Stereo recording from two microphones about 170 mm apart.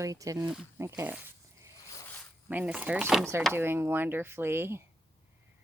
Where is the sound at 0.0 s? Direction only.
20° right (ahead or behind).